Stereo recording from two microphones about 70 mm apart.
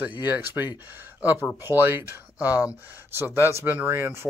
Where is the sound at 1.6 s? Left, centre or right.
Right.